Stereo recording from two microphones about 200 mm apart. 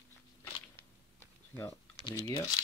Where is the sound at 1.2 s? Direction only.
15° left (ahead or behind).